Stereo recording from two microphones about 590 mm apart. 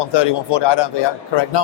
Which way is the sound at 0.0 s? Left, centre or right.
Left.